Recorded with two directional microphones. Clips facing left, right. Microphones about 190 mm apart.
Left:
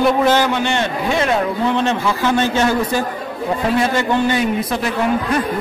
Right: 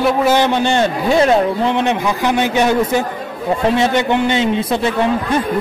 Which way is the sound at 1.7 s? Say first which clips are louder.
Right 1 dB; 15° right (ahead or behind).